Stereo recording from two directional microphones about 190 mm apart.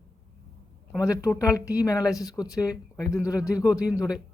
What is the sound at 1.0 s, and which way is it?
Speech, 15° left (ahead or behind).